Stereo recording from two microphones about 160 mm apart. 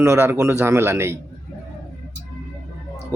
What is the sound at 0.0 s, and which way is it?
Speech, 15° right (ahead or behind).